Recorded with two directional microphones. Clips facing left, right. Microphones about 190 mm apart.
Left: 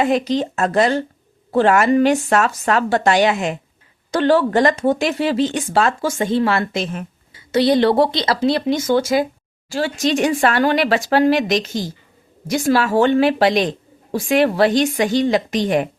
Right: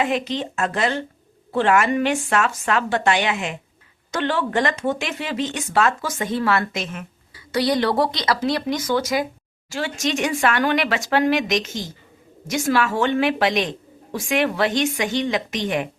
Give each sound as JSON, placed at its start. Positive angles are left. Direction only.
{"t": 0.0, "sound": "a woman's voice", "side_deg": 40}